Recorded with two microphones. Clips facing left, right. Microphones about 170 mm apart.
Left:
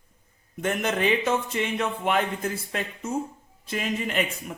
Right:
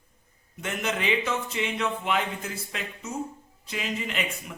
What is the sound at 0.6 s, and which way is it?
A man's voice, 50° left (ahead or behind).